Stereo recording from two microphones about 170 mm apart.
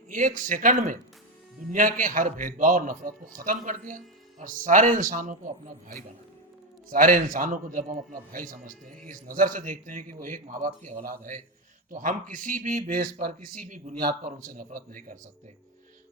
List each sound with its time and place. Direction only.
0.1 s speech: 50° right (ahead or behind)
2.0 s speech: 50° right (ahead or behind)